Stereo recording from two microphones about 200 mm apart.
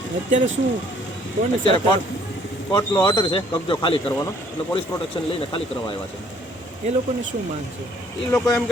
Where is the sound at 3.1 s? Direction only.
25° left (ahead or behind).